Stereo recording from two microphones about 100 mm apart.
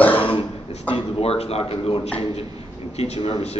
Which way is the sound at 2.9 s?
90° left.